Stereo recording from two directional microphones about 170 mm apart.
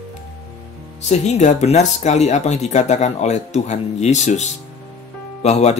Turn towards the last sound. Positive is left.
turn(degrees=40)  # may be behind; listen again after turning